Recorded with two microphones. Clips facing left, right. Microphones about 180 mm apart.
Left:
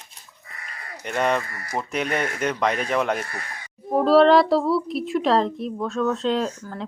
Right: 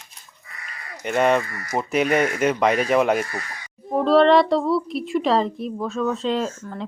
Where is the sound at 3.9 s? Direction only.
Centre (ahead or behind).